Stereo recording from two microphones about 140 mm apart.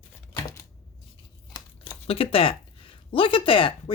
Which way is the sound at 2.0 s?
45° left (ahead or behind).